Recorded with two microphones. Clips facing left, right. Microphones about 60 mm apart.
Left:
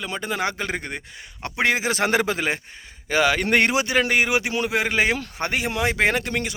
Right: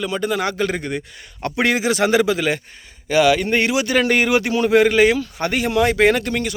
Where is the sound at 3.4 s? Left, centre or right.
Left.